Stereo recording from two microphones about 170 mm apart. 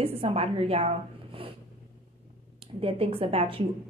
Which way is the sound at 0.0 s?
35° right (ahead or behind).